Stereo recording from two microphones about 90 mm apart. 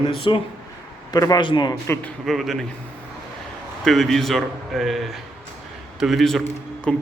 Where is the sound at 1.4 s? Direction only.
60° left (ahead or behind).